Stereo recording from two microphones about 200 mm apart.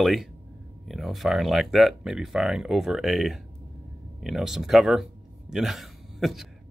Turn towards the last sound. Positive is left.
turn(degrees=0)  # may be behind; listen again after turning